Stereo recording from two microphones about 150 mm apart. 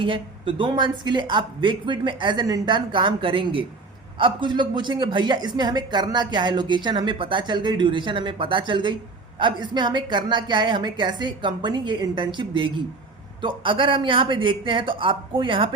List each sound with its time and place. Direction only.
0.0 s speech: 35° right (ahead or behind)